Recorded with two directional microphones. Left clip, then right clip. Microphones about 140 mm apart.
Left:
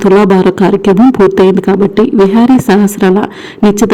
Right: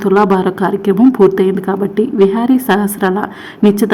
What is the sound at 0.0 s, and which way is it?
Speech, 45° left (ahead or behind).